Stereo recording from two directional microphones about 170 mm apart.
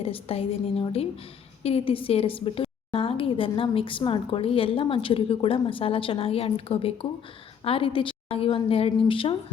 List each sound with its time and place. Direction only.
0.0 s a woman's voice: 35° left (ahead or behind)